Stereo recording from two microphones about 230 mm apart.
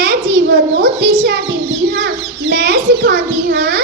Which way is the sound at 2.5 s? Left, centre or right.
Right.